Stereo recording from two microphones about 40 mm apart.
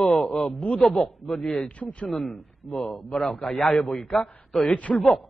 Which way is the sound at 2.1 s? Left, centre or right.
Centre.